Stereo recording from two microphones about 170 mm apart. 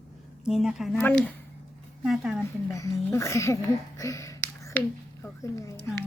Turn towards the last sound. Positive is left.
turn(degrees=20)  # may be behind; listen again after turning